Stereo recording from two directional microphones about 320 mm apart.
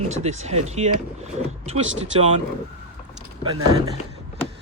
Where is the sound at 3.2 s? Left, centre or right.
Centre.